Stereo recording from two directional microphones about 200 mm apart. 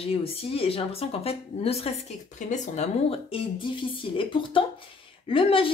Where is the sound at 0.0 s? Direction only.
30° left (ahead or behind).